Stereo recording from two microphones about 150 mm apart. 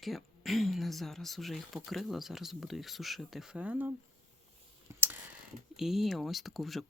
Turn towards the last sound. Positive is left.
turn(degrees=0)  # may be behind; listen again after turning